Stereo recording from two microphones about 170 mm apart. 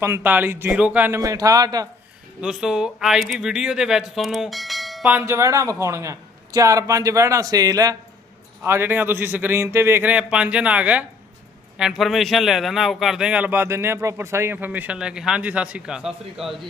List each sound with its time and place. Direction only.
0.0 s a man's voice: 10° right (ahead or behind)
2.4 s a man's voice: 5° right (ahead or behind)
5.1 s a man's voice: 15° right (ahead or behind)